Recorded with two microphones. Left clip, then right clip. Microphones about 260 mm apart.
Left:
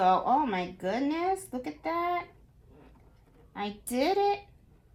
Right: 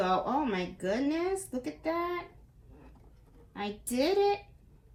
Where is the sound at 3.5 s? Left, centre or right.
Left.